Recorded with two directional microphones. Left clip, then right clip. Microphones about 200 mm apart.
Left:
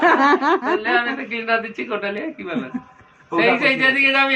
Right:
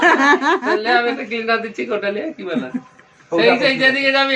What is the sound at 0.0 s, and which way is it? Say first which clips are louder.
Speech: right 2 dB; 10° right (ahead or behind).